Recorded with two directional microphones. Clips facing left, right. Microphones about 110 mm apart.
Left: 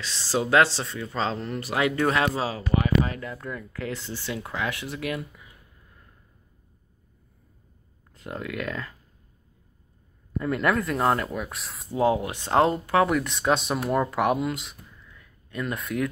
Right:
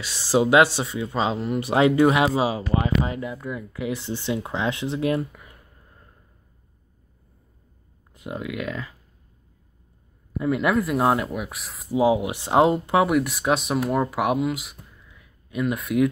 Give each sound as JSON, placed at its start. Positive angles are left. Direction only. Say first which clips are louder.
{"t": 0.0, "sound": "speech", "louder": "right 6 dB", "side_deg": -15}
{"t": 1.7, "sound": "speech", "louder": "right 7 dB", "side_deg": -25}
{"t": 2.0, "sound": "speech", "louder": "right 5 dB", "side_deg": -15}
{"t": 5.3, "sound": "a sound", "louder": "right 4 dB", "side_deg": -60}
{"t": 8.1, "sound": "speech", "louder": "right 2 dB", "side_deg": -10}
{"t": 10.3, "sound": "speech", "louder": "right 3 dB", "side_deg": -5}
{"t": 12.0, "sound": "speech", "louder": "right 3 dB", "side_deg": -15}